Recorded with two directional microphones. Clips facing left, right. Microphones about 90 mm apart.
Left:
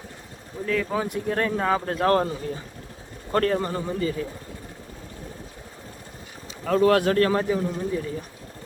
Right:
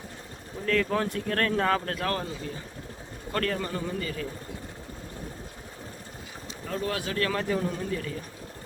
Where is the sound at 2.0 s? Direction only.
40° left (ahead or behind).